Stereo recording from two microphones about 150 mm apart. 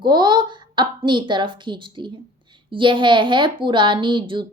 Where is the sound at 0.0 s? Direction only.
30° right (ahead or behind).